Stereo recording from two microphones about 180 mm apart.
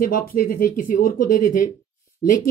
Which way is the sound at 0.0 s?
50° left (ahead or behind).